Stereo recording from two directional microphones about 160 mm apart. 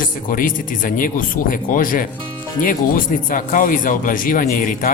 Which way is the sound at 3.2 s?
55° left (ahead or behind).